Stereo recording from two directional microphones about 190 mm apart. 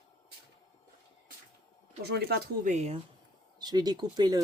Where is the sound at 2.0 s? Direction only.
55° right (ahead or behind).